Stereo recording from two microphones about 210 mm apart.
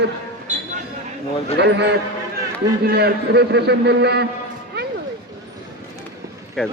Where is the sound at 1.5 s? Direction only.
55° right (ahead or behind).